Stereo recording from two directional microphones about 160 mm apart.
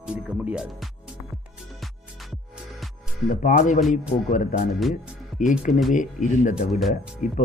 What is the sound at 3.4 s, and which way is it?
Speech, 55° left (ahead or behind).